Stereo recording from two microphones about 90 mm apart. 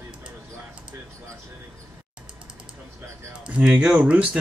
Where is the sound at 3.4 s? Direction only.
10° right (ahead or behind).